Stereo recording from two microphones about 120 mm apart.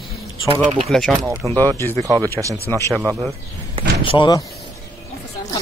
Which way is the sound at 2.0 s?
30° right (ahead or behind).